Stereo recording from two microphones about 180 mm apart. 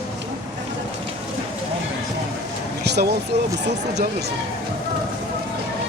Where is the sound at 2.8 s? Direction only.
65° right (ahead or behind).